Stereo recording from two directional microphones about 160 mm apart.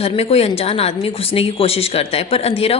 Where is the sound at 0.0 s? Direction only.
40° left (ahead or behind).